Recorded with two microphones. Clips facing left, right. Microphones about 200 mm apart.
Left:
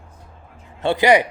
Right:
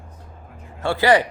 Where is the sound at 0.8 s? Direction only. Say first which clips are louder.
Left 2 dB; 15° left (ahead or behind).